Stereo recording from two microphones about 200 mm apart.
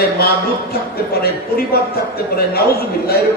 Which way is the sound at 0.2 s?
50° left (ahead or behind).